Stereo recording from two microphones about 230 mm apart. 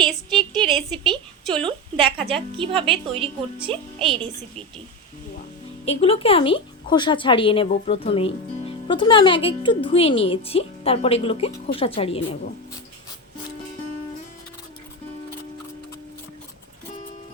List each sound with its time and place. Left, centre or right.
0.0 s a woman's voice: centre
0.6 s a sound: centre
2.3 s a woman's voice: right
3.9 s a woman's voice: centre
5.8 s speech: left